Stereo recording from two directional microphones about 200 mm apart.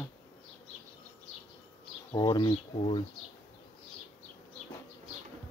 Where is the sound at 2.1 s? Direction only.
20° left (ahead or behind).